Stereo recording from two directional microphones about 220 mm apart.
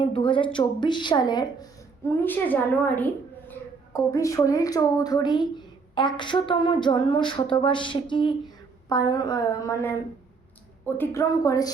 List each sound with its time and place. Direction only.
0.0 s speech: 20° left (ahead or behind)
2.2 s a woman's voice: 10° left (ahead or behind)